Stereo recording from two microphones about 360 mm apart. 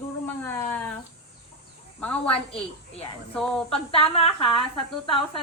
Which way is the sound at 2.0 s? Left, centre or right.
Centre.